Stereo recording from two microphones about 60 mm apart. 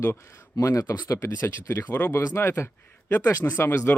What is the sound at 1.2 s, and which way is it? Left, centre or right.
Speech, left.